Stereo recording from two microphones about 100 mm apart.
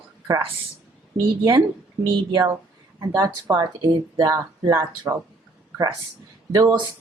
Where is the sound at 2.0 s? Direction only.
45° right (ahead or behind).